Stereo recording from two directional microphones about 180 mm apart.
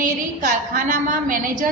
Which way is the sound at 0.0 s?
45° right (ahead or behind).